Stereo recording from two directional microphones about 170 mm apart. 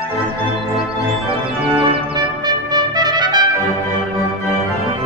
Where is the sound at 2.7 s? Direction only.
25° right (ahead or behind).